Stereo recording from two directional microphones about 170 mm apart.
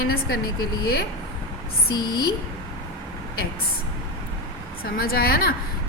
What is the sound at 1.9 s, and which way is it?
Speech, 25° left (ahead or behind).